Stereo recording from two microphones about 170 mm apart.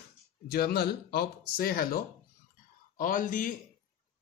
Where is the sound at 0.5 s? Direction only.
65° left (ahead or behind).